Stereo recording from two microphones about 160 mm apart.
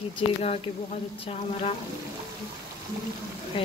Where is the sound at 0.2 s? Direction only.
35° left (ahead or behind).